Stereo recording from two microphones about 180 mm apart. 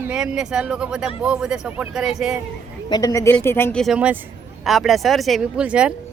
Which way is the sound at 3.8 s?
5° right (ahead or behind).